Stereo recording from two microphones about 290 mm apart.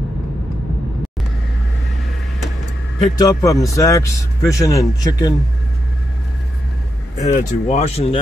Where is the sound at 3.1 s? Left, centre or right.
Centre.